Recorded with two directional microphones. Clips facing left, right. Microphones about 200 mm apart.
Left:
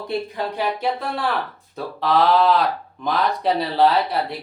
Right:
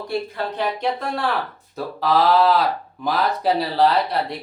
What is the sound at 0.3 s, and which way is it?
Speech, 10° left (ahead or behind).